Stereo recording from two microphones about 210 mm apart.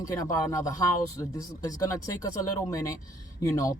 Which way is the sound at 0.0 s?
15° left (ahead or behind).